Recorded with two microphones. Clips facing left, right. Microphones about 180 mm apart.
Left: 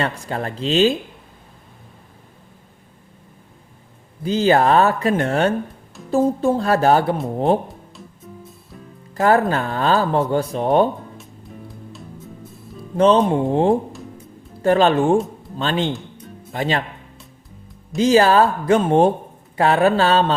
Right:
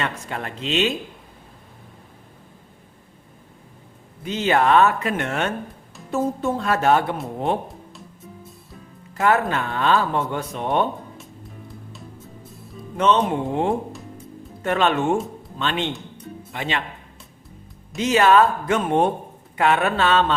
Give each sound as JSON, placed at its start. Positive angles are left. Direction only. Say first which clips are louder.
{"t": 0.0, "sound": "speech", "louder": "left 4 dB", "side_deg": 35}
{"t": 4.2, "sound": "speech", "louder": "left 4 dB", "side_deg": 35}
{"t": 9.1, "sound": "speech", "louder": "left 4 dB", "side_deg": 35}
{"t": 11.2, "sound": "music", "louder": "left 2 dB", "side_deg": 0}
{"t": 13.0, "sound": "speech", "louder": "left 5 dB", "side_deg": 35}
{"t": 17.9, "sound": "speech", "louder": "left 3 dB", "side_deg": 35}